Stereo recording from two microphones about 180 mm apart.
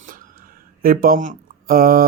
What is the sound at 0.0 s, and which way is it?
Speech, 50° right (ahead or behind).